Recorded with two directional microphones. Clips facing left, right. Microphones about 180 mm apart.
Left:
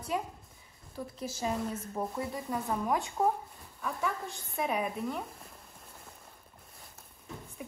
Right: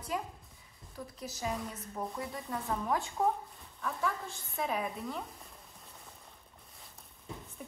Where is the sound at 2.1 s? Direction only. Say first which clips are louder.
Left 4 dB; 25° left (ahead or behind).